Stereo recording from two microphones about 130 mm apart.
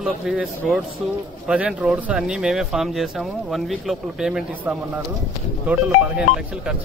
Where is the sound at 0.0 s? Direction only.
5° right (ahead or behind).